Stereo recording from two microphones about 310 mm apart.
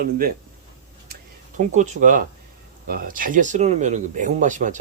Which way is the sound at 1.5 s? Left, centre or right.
Right.